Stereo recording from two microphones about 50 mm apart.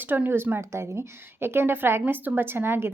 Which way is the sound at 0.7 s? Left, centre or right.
Right.